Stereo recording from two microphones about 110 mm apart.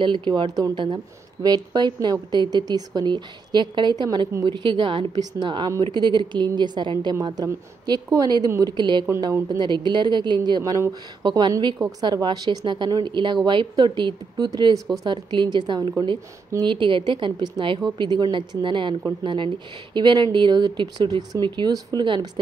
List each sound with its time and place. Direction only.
0.0 s a woman's voice: 45° right (ahead or behind)
7.4 s a woman's voice: 35° right (ahead or behind)
8.7 s a woman's voice: 40° right (ahead or behind)